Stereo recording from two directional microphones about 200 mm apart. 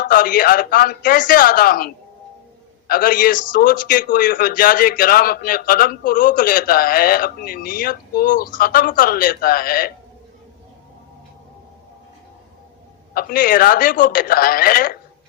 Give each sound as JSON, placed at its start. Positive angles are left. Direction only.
{"t": 0.0, "sound": "a man's voice", "side_deg": 45}
{"t": 13.1, "sound": "a man's voice", "side_deg": 45}